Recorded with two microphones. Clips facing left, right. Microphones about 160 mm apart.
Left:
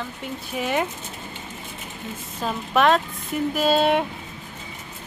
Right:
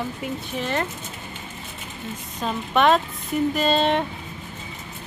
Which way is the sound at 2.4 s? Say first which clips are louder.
Even; centre (ahead or behind).